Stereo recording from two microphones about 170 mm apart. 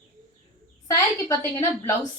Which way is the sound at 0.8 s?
20° left (ahead or behind).